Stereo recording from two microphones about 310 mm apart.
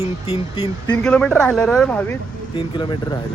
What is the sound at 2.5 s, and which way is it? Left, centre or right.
Speech, centre.